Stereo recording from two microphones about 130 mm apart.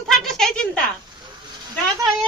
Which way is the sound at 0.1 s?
5° left (ahead or behind).